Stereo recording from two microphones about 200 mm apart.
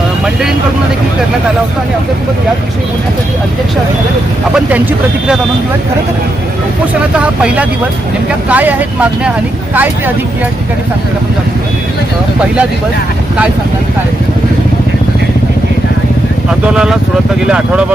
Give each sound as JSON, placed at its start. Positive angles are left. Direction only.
{"t": 7.2, "sound": "speech", "side_deg": -5}
{"t": 16.6, "sound": "speech", "side_deg": -5}